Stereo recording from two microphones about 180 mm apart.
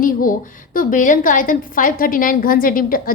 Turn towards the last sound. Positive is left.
turn(degrees=50)  # may be behind; listen again after turning